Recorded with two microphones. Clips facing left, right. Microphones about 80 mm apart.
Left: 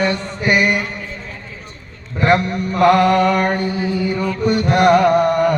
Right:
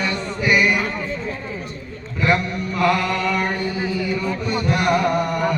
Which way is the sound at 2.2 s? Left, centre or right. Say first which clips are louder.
Left 5 dB; left.